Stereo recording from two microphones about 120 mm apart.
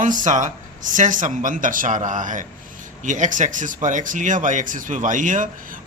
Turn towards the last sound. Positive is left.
turn(degrees=-90)